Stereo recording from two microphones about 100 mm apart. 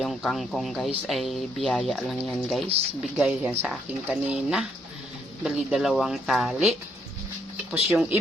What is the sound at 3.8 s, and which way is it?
Speech, 10° right (ahead or behind).